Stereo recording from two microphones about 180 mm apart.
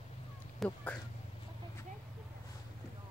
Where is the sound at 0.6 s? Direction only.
5° left (ahead or behind).